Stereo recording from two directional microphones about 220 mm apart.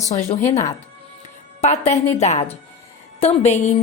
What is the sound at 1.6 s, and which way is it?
Speech, 30° left (ahead or behind).